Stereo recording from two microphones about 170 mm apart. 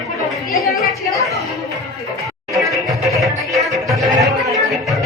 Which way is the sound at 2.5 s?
Centre (ahead or behind).